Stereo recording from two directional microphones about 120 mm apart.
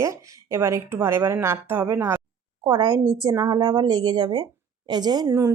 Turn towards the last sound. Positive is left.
turn(degrees=-25)  # may be behind; listen again after turning